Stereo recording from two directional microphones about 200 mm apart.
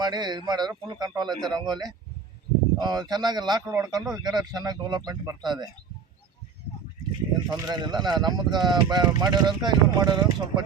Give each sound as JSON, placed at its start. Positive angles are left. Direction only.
{"t": 0.0, "sound": "speech", "side_deg": -20}
{"t": 7.5, "sound": "speech", "side_deg": -20}